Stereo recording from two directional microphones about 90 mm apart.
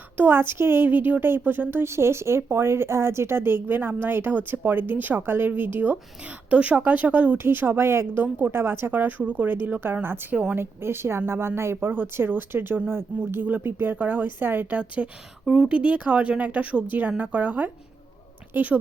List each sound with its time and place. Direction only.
0.2 s a woman's voice: 25° right (ahead or behind)
10.3 s speech: 10° right (ahead or behind)
10.6 s a woman's voice: 25° right (ahead or behind)